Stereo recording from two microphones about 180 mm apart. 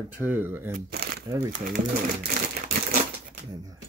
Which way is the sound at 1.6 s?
50° right (ahead or behind).